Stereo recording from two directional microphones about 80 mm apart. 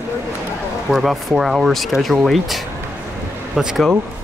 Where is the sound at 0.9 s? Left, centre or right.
Centre.